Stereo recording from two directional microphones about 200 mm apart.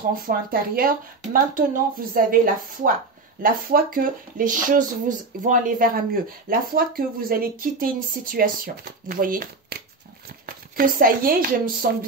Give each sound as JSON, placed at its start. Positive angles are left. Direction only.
{"t": 0.1, "sound": "speech", "side_deg": -45}